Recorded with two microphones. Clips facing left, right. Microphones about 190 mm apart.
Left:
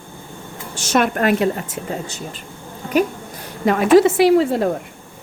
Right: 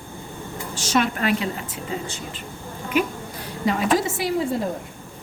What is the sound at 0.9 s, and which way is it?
Speech, 50° left (ahead or behind).